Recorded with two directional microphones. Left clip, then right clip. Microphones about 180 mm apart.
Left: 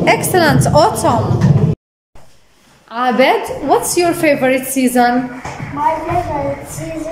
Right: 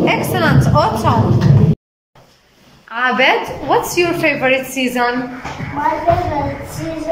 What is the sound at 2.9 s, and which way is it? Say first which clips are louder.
A woman's voice: left 1 dB; 25° left (ahead or behind).